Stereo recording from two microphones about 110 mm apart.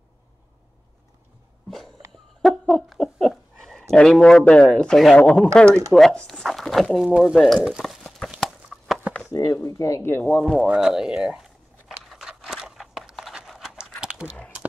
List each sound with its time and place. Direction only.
2.4 s a sound: centre (ahead or behind)
3.9 s speech: 5° left (ahead or behind)
5.7 s speech: 30° right (ahead or behind)
5.9 s speech: 5° left (ahead or behind)
8.4 s clip-clop: centre (ahead or behind)
9.3 s speech: 35° left (ahead or behind)
10.4 s speech: 10° right (ahead or behind)
12.2 s a sound: 5° right (ahead or behind)